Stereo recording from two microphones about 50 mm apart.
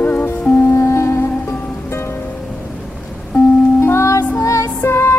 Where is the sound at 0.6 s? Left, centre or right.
Left.